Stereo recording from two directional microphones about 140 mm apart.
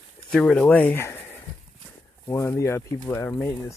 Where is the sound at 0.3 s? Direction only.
5° left (ahead or behind).